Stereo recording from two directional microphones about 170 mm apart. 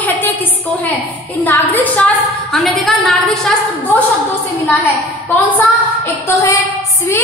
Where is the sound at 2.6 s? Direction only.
Centre (ahead or behind).